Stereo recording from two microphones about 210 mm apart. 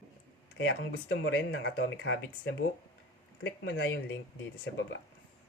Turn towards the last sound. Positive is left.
turn(degrees=60)  # may be behind; listen again after turning